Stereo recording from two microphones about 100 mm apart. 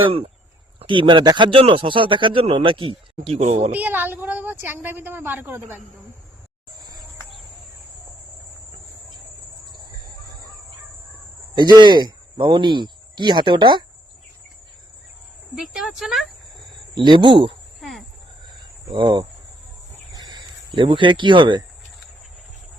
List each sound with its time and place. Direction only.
0.8 s speech: 55° right (ahead or behind)
1.5 s speech: 65° right (ahead or behind)
3.7 s a woman's voice: 20° right (ahead or behind)
11.5 s speech: 50° right (ahead or behind)
15.5 s speech: 5° right (ahead or behind)
16.9 s speech: 50° right (ahead or behind)
17.7 s cricket: centre (ahead or behind)
18.9 s speech: 55° right (ahead or behind)
20.1 s cricket: 50° right (ahead or behind)